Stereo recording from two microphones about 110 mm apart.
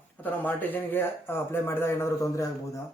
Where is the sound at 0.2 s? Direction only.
15° left (ahead or behind).